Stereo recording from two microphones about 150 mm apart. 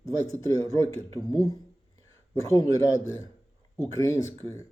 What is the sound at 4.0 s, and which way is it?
Speech, 20° left (ahead or behind).